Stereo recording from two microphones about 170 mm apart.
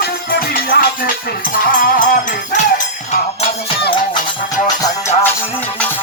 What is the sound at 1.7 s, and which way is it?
Music, 55° left (ahead or behind).